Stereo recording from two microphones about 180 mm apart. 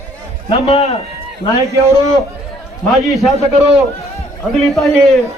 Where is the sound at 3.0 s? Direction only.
Centre (ahead or behind).